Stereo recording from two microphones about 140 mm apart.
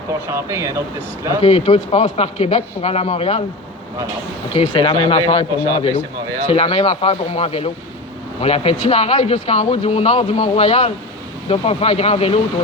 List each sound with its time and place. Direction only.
0.1 s speech: 20° right (ahead or behind)
1.4 s speech: 45° left (ahead or behind)
4.5 s speech: 40° left (ahead or behind)